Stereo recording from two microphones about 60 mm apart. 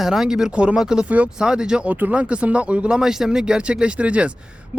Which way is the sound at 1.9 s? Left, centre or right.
Right.